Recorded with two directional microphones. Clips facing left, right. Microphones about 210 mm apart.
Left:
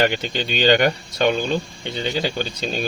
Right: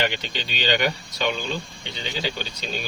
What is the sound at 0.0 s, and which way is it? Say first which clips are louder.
Speech: left 6 dB; 45° left (ahead or behind).